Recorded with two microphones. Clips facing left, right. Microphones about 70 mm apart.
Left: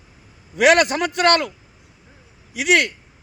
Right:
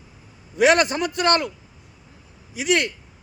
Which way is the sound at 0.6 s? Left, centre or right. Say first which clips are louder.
Left 2 dB; left.